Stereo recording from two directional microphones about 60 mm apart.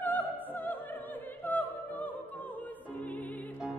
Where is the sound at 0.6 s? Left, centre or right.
Left.